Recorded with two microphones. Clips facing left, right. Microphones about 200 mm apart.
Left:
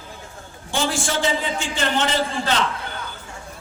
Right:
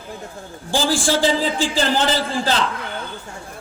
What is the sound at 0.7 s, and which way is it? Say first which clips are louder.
A man's voice: right 4 dB; 30° right (ahead or behind).